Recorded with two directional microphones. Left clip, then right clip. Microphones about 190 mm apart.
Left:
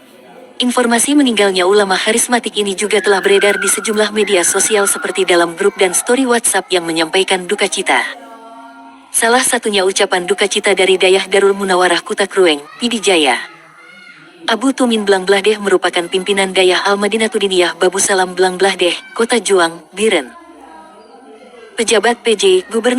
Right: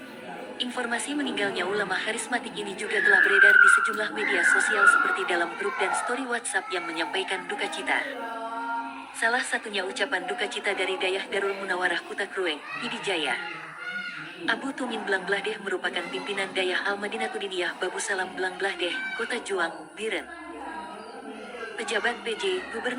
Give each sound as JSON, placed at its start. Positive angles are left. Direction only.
{"t": 0.6, "sound": "a woman's voice", "side_deg": 50}
{"t": 9.1, "sound": "a woman's voice", "side_deg": 50}
{"t": 14.4, "sound": "a woman's voice", "side_deg": 50}
{"t": 21.8, "sound": "a woman's voice", "side_deg": 50}